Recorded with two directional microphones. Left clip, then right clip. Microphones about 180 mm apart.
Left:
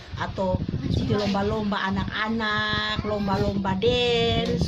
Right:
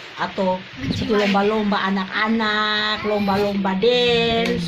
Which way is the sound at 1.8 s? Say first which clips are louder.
Right 6 dB; 30° left (ahead or behind).